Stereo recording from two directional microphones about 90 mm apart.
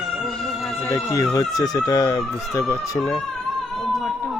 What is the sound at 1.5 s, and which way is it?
Speech, 45° left (ahead or behind).